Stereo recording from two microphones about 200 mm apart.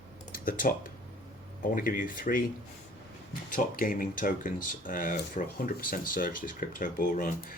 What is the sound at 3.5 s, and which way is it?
Speech, 45° left (ahead or behind).